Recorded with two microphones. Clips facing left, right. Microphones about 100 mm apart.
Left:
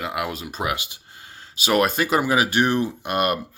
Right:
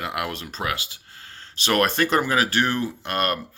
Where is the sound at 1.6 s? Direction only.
5° left (ahead or behind).